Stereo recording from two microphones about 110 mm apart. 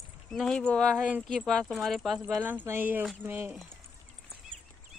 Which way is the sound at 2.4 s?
15° right (ahead or behind).